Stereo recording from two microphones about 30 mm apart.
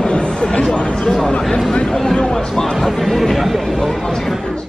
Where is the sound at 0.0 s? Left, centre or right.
Left.